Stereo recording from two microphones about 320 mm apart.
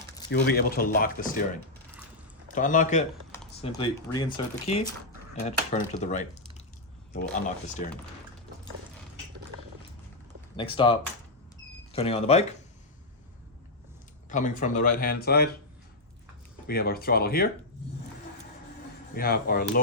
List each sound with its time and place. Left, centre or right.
0.5 s speech: left
2.6 s speech: left
7.3 s speech: left
10.6 s speech: centre
14.3 s speech: left
16.6 s speech: left
19.1 s speech: left